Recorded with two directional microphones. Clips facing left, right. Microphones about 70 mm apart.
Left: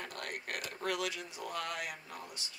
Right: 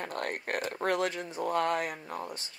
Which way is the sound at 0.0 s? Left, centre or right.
Right.